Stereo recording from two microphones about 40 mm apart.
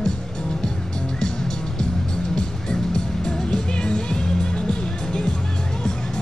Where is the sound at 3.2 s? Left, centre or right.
Left.